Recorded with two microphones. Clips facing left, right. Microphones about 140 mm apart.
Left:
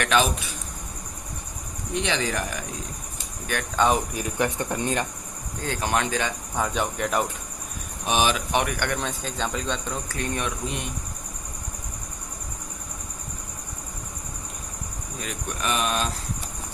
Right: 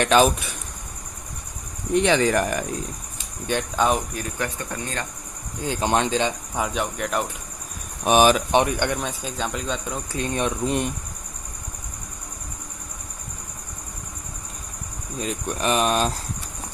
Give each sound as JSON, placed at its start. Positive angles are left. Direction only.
{"t": 0.0, "sound": "speech", "side_deg": -35}
{"t": 2.0, "sound": "speech", "side_deg": -50}
{"t": 3.8, "sound": "cricket", "side_deg": 0}
{"t": 4.1, "sound": "speech", "side_deg": 15}
{"t": 5.5, "sound": "speech", "side_deg": -20}
{"t": 6.6, "sound": "cricket", "side_deg": 0}
{"t": 8.0, "sound": "speech", "side_deg": -50}
{"t": 8.5, "sound": "speech", "side_deg": -25}
{"t": 9.0, "sound": "speech", "side_deg": -10}
{"t": 10.1, "sound": "speech", "side_deg": -20}
{"t": 15.2, "sound": "speech", "side_deg": -35}